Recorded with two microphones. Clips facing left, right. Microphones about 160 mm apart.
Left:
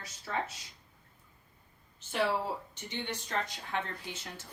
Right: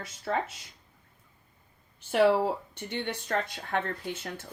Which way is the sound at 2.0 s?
55° right (ahead or behind).